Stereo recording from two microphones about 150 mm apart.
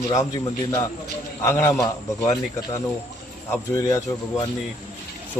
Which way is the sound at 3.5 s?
20° left (ahead or behind).